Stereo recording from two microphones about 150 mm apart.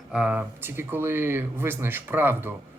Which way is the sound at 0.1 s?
10° right (ahead or behind).